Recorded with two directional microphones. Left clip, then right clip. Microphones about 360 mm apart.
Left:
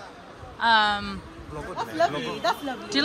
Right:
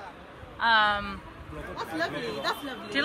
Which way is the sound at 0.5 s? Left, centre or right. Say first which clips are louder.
Left 2 dB; centre.